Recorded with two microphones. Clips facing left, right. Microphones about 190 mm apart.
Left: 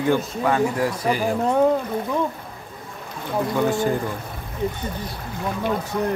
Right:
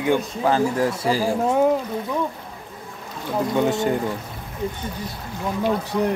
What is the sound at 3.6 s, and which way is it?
Speech, 20° right (ahead or behind).